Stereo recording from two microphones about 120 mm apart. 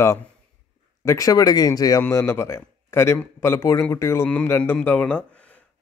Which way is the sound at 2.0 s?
20° left (ahead or behind).